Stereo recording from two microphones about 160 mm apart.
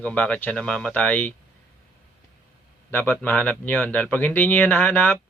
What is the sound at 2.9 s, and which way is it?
A man's voice, 15° left (ahead or behind).